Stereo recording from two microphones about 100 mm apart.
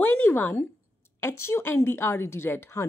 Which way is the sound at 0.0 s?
20° left (ahead or behind).